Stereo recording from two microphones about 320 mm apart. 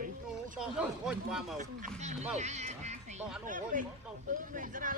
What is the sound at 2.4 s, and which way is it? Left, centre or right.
Music, right.